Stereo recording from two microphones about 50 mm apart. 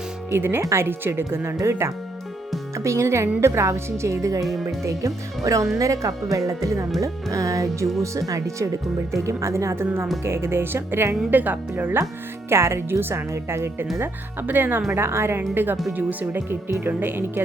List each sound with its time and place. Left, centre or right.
0.3 s speech: right
0.6 s a woman's voice: right
0.9 s speech: right
1.5 s a woman's voice: right
2.7 s a woman's voice: right
10.2 s speech: right
11.3 s speech: right
12.5 s speech: right
13.0 s speech: right
13.3 s a woman's voice: right
14.0 s speech: right
14.8 s speech: right